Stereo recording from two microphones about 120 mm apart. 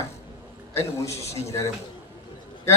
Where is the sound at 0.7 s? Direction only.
25° left (ahead or behind).